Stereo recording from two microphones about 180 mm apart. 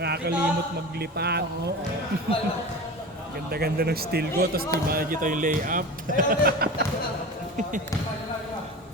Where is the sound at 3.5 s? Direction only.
60° right (ahead or behind).